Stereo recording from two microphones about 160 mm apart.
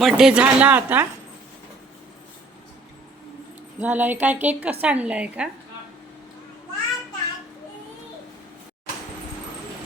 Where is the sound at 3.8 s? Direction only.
10° right (ahead or behind).